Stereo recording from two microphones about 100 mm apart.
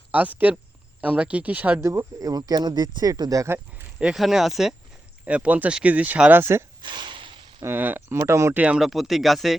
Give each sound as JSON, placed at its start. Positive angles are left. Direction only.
{"t": 0.1, "sound": "speech", "side_deg": -15}
{"t": 1.8, "sound": "speech", "side_deg": -30}
{"t": 3.9, "sound": "speech", "side_deg": -5}
{"t": 6.8, "sound": "a sound", "side_deg": -50}
{"t": 7.6, "sound": "speech", "side_deg": -20}
{"t": 8.5, "sound": "speech", "side_deg": -10}
{"t": 8.9, "sound": "speech", "side_deg": 0}